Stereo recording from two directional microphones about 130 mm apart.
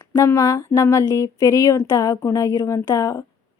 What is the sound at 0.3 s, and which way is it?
A woman's voice, 25° left (ahead or behind).